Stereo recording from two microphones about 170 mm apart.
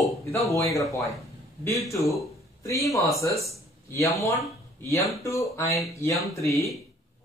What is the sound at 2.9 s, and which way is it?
A man's voice, 20° left (ahead or behind).